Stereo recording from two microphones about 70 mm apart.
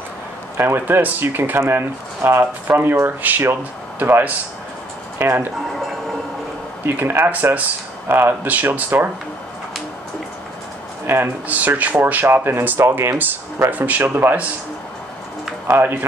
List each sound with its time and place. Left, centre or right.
0.6 s speech: right
6.8 s speech: right
11.1 s speech: right
13.7 s speech: right
15.7 s speech: right